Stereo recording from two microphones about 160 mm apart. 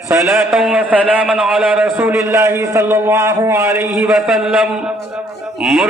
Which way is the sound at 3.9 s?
Centre (ahead or behind).